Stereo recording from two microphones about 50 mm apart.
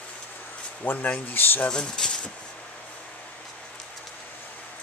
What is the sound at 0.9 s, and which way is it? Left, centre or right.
Speech, left.